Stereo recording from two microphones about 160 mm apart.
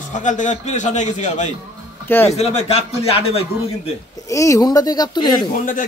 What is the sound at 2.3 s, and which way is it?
A man's voice, 40° left (ahead or behind).